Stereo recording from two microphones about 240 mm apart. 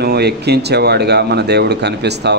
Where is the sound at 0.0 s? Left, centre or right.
Right.